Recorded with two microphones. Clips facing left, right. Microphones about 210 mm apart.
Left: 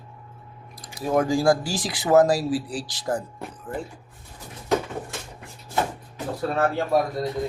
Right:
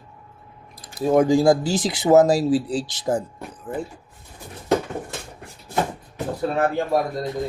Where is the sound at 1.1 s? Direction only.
20° right (ahead or behind).